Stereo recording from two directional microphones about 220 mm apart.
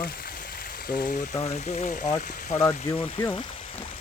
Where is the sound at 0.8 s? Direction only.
40° left (ahead or behind).